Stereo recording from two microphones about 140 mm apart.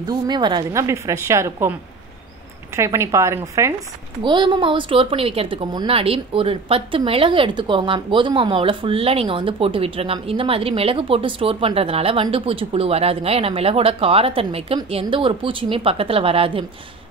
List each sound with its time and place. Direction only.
0.0 s speech: 30° right (ahead or behind)
0.7 s speech: 20° right (ahead or behind)
4.2 s speech: 35° right (ahead or behind)